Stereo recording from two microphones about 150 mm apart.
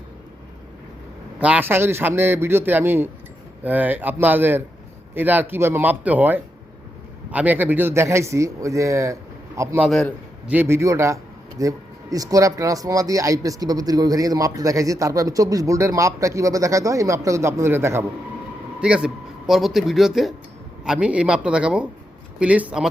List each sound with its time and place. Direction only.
1.4 s a man's voice: 10° right (ahead or behind)